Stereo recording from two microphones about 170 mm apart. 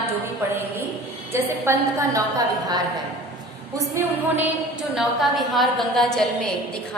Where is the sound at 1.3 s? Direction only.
15° right (ahead or behind).